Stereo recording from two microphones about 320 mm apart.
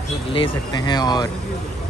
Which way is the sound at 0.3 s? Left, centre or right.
Centre.